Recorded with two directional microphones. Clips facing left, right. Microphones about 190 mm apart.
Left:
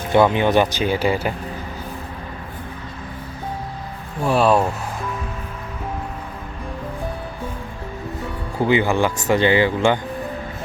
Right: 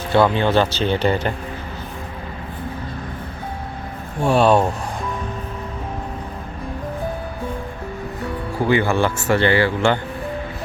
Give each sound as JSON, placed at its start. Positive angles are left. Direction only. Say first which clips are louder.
{"t": 0.1, "sound": "speech", "louder": "left 1 dB", "side_deg": 15}
{"t": 4.3, "sound": "speech", "louder": "right 1 dB", "side_deg": 0}
{"t": 8.6, "sound": "speech", "louder": "even", "side_deg": 15}